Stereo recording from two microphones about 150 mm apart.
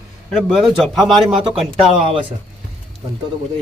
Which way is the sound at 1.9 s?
35° right (ahead or behind).